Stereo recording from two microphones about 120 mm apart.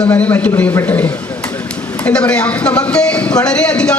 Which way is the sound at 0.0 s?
10° left (ahead or behind).